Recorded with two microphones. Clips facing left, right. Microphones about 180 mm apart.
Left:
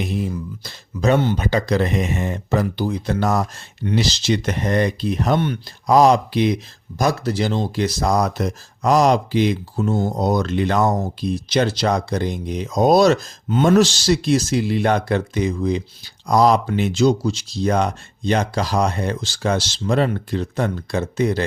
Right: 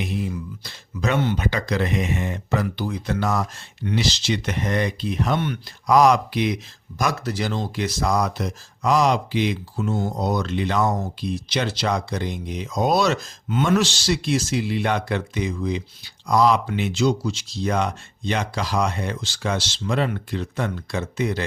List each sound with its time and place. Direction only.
0.6 s speech: 35° left (ahead or behind)